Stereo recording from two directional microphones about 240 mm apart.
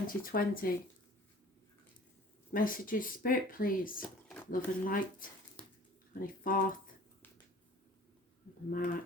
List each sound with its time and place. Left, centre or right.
0.1 s speech: left
2.5 s speech: left
4.0 s a sound: centre
4.5 s speech: left
6.1 s speech: left
8.7 s speech: left